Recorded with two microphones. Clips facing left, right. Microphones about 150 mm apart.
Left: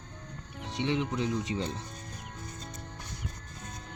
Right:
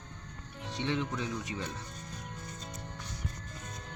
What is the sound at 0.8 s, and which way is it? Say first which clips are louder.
Speech: left 3 dB; 15° left (ahead or behind).